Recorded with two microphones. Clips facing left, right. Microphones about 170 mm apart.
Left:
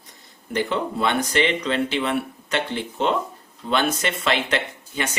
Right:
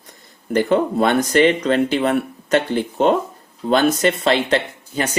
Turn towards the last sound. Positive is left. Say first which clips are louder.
# right 4 dB
turn(degrees=-35)  # may be behind; listen again after turning